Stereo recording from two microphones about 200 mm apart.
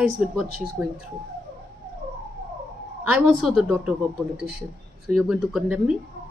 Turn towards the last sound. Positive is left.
turn(degrees=-5)  # may be behind; listen again after turning